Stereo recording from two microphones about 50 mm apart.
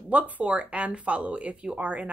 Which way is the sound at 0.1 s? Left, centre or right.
Right.